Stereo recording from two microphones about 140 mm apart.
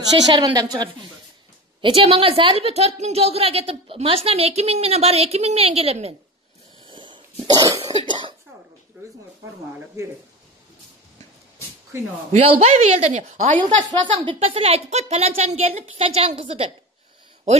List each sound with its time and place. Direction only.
0.3 s a woman's voice: 30° right (ahead or behind); by 6.1 s 45° right (ahead or behind)
6.9 s cough: 35° right (ahead or behind)
12.3 s speech: 50° right (ahead or behind)
13.8 s a woman's voice: 35° right (ahead or behind)